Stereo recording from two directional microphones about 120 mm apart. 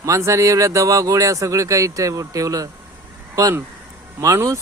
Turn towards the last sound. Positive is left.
turn(degrees=-25)  # may be behind; listen again after turning